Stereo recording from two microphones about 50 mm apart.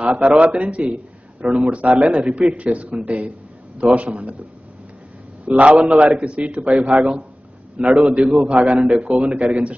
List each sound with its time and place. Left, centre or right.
0.0 s a man's voice: right
5.4 s a man's voice: right